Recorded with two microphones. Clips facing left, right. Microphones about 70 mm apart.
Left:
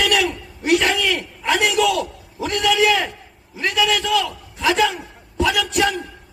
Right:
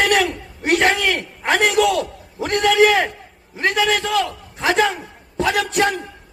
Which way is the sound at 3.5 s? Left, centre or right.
Right.